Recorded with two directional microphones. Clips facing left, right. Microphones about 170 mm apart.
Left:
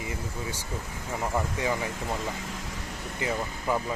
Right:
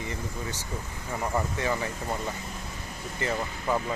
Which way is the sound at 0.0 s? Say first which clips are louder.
Even; 10° left (ahead or behind).